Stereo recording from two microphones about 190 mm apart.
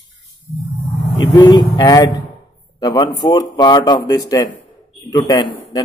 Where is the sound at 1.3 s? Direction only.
20° left (ahead or behind).